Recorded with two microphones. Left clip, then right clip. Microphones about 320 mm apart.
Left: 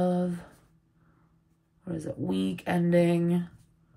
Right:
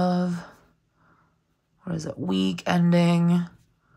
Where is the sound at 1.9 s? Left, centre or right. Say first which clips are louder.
Right 3 dB; centre.